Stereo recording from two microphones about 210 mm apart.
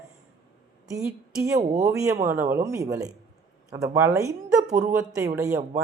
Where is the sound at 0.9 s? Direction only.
15° right (ahead or behind).